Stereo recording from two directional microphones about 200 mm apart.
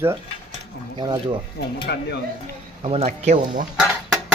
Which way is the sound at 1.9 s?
55° left (ahead or behind).